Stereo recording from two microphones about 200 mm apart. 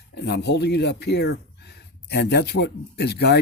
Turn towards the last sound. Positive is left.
turn(degrees=55)  # may be behind; listen again after turning